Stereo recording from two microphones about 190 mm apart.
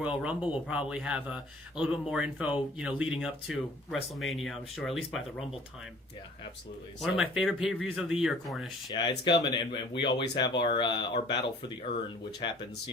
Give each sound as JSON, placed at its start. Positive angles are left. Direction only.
{"t": 0.0, "sound": "speech", "side_deg": -5}
{"t": 7.0, "sound": "speech", "side_deg": -5}
{"t": 8.9, "sound": "speech", "side_deg": 25}